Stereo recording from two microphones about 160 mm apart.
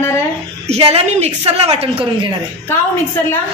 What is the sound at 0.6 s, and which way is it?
A man's voice, 40° right (ahead or behind).